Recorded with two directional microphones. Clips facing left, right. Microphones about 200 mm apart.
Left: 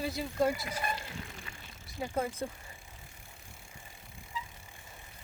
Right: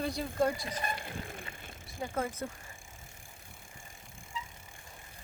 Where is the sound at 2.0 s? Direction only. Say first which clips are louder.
Left 1 dB; 15° left (ahead or behind).